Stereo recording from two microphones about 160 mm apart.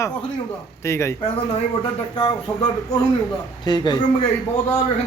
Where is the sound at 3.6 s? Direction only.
25° left (ahead or behind).